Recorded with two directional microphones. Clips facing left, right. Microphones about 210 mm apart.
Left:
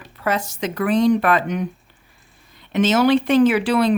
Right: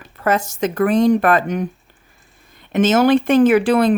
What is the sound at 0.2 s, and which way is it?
Speech, 45° right (ahead or behind).